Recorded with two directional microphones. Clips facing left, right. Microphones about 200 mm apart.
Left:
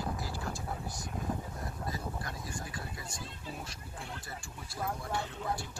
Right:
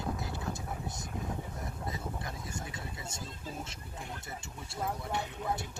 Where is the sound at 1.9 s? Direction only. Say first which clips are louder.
Even; 20° right (ahead or behind).